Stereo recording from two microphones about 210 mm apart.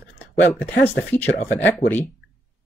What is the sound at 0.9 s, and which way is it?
Speech, 10° left (ahead or behind).